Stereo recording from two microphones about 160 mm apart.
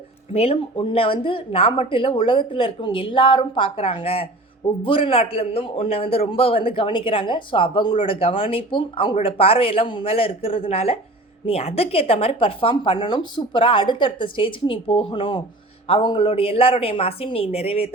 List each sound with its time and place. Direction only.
0.3 s a man's voice: 40° left (ahead or behind)